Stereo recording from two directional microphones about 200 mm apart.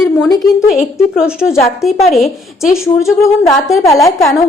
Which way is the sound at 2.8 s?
15° left (ahead or behind).